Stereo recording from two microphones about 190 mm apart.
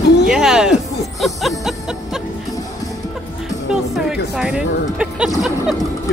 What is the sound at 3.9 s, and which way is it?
Music, 5° right (ahead or behind).